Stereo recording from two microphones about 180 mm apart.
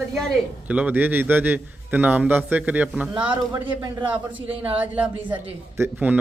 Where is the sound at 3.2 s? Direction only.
30° right (ahead or behind).